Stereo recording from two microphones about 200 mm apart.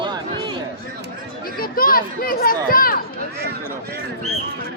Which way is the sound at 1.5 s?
45° left (ahead or behind).